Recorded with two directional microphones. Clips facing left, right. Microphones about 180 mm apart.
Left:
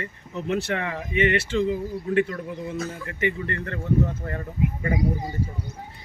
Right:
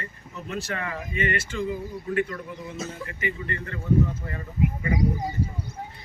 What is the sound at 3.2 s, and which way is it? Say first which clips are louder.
Speech: left 5 dB; 60° left (ahead or behind).